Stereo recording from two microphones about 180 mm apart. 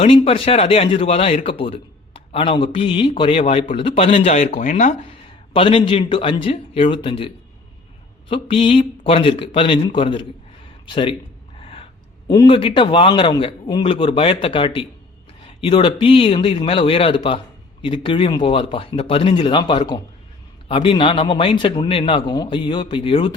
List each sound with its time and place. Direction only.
0.0 s a man's voice: 30° left (ahead or behind)
5.5 s a man's voice: 30° left (ahead or behind)
11.6 s a sound: 30° left (ahead or behind)
12.3 s a man's voice: 25° left (ahead or behind)